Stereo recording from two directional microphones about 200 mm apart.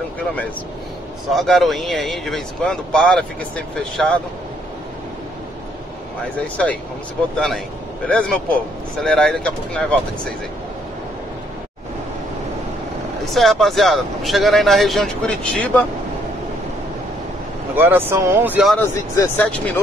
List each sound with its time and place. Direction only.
1.3 s speech: centre (ahead or behind)
6.4 s speech: 5° left (ahead or behind)
13.2 s speech: centre (ahead or behind)
17.7 s speech: 10° right (ahead or behind)
19.1 s speech: 10° left (ahead or behind)